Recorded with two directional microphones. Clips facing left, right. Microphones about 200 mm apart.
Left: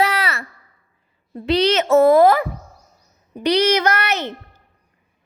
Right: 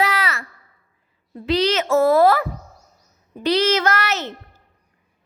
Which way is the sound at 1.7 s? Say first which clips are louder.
Left 5 dB; 25° left (ahead or behind).